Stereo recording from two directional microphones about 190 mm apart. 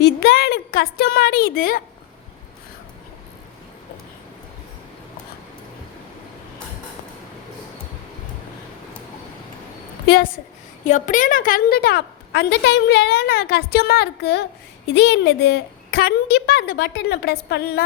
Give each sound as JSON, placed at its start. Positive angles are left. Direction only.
{"t": 0.0, "sound": "a woman's voice", "side_deg": 55}
{"t": 10.8, "sound": "a woman's voice", "side_deg": 40}